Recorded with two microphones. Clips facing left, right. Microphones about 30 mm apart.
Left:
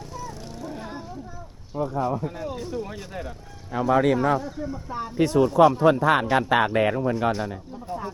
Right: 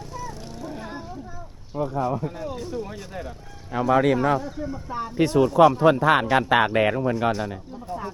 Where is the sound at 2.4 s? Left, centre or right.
Centre.